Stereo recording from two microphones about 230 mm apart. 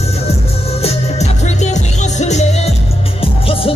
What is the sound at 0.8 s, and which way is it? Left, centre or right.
Music, left.